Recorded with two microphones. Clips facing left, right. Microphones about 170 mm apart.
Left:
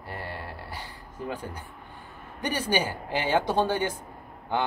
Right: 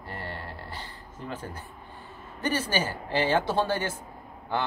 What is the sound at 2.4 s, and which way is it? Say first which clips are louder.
Speech: left 1 dB; 15° left (ahead or behind).